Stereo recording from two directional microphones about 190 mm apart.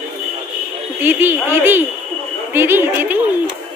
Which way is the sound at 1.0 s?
10° right (ahead or behind).